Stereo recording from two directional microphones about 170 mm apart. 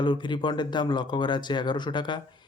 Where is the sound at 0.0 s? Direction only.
25° left (ahead or behind).